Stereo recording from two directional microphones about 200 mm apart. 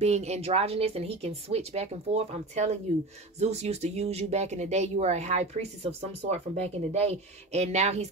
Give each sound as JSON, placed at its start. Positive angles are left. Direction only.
{"t": 0.0, "sound": "speech", "side_deg": -35}